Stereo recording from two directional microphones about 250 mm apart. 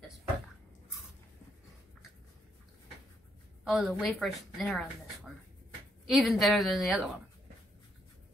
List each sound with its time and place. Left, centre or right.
3.6 s speech: centre